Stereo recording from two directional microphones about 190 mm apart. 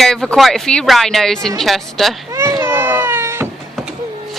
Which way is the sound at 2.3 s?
15° right (ahead or behind).